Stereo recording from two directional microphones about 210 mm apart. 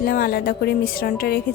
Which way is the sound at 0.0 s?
45° left (ahead or behind).